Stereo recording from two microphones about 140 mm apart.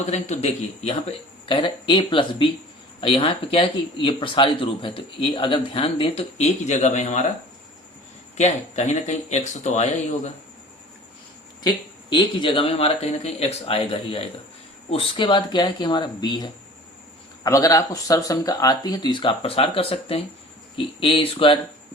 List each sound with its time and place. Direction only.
0.0 s speech: 55° left (ahead or behind)
8.4 s speech: 55° left (ahead or behind)
12.1 s speech: 35° left (ahead or behind)